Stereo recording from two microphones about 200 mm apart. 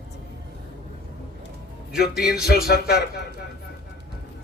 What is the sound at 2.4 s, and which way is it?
Speech, 50° left (ahead or behind).